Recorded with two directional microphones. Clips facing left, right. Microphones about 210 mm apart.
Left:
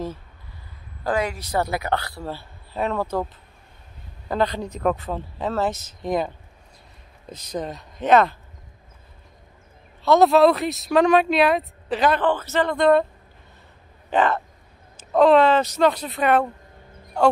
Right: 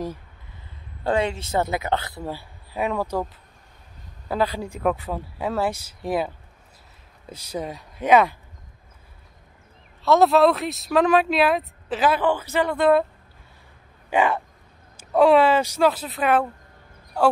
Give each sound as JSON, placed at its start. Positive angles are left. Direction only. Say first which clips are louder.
{"t": 1.0, "sound": "a man's voice", "louder": "right 1 dB", "side_deg": -25}
{"t": 4.3, "sound": "speech", "louder": "left 1 dB", "side_deg": -5}
{"t": 10.0, "sound": "speech", "louder": "left 1 dB", "side_deg": 0}
{"t": 14.1, "sound": "speech", "louder": "left 1 dB", "side_deg": -10}